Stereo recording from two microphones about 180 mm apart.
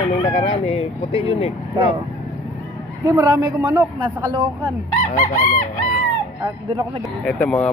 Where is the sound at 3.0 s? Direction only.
10° right (ahead or behind).